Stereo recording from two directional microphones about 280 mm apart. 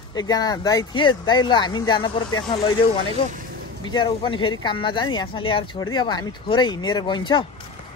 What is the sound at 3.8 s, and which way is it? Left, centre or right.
A man's voice, centre.